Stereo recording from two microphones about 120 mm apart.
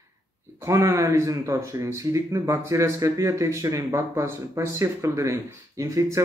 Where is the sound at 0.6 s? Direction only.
25° right (ahead or behind).